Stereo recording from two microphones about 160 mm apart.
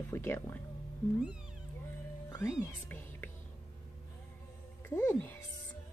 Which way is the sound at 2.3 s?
15° left (ahead or behind).